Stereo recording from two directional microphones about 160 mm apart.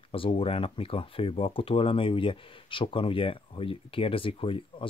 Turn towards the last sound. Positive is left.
turn(degrees=35)  # may be behind; listen again after turning